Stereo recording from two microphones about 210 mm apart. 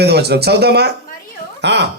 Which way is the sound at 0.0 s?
50° right (ahead or behind).